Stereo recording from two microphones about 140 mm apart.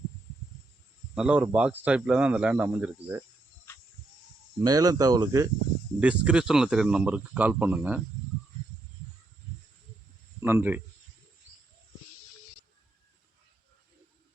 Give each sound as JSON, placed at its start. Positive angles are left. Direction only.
{"t": 1.1, "sound": "speech", "side_deg": -5}
{"t": 4.6, "sound": "speech", "side_deg": -25}
{"t": 6.0, "sound": "speech", "side_deg": -10}
{"t": 10.4, "sound": "speech", "side_deg": -15}